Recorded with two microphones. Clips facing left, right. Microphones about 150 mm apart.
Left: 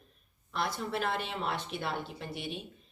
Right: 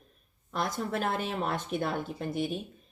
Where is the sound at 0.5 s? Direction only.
45° right (ahead or behind).